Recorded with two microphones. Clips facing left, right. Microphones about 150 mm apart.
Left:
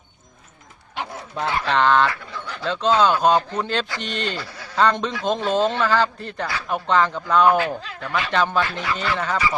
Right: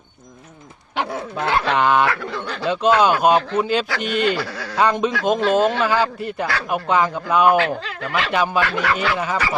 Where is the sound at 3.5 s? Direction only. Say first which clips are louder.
Right 5 dB; 10° right (ahead or behind).